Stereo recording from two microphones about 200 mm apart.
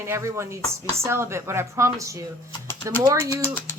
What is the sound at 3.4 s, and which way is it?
Speech, 10° left (ahead or behind).